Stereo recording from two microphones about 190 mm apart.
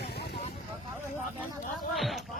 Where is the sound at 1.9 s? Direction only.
Centre (ahead or behind).